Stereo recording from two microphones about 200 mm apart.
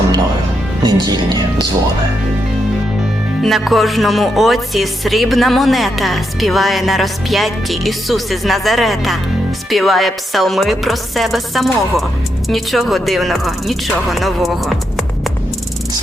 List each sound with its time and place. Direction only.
0.9 s speech: 20° right (ahead or behind)
3.4 s music: centre (ahead or behind)